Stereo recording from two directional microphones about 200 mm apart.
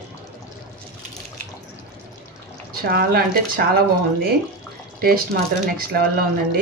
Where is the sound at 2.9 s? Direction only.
50° right (ahead or behind).